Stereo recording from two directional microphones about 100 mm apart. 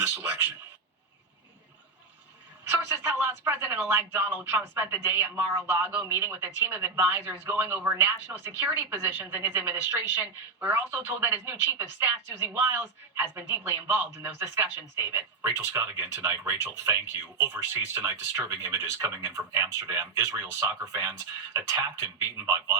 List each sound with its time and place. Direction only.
0.0 s a man's voice: 20° right (ahead or behind)
3.2 s speech: 20° right (ahead or behind)
18.4 s speech: 30° right (ahead or behind)